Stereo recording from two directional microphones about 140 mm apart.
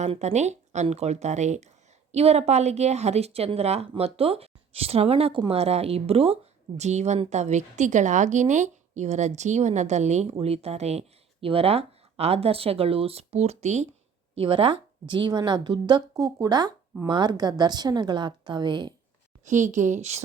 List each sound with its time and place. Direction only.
0.0 s a woman's voice: 50° right (ahead or behind)
14.3 s a woman's voice: 40° right (ahead or behind)
19.5 s a woman's voice: 60° right (ahead or behind)